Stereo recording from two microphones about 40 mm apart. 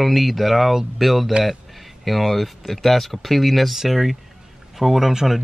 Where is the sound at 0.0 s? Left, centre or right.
Centre.